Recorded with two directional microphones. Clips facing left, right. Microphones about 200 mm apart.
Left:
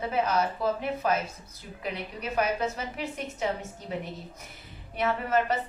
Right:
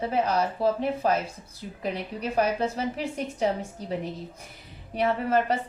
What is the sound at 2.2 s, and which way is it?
A woman's voice, 30° right (ahead or behind).